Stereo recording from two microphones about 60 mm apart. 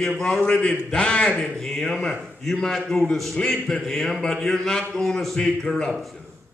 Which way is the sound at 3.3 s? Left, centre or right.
Centre.